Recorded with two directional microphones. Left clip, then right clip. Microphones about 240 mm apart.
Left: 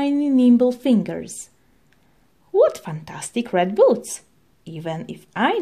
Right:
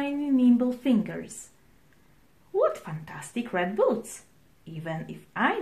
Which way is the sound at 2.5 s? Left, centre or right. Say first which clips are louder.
Left 8 dB; left.